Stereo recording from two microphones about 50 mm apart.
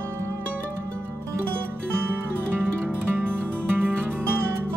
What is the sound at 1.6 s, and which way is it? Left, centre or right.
Music, right.